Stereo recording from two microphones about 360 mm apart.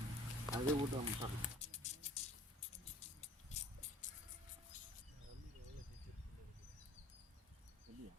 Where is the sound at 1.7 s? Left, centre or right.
Centre.